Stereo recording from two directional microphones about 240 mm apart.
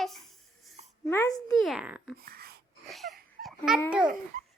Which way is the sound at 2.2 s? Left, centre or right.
Right.